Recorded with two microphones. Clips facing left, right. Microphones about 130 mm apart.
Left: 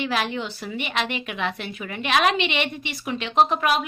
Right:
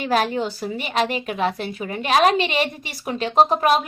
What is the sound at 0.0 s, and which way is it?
A woman's voice, 40° right (ahead or behind).